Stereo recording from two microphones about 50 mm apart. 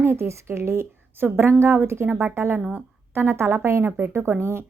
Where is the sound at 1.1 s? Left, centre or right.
Right.